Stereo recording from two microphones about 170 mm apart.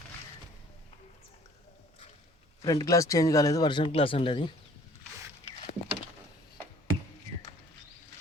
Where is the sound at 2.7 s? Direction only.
20° left (ahead or behind).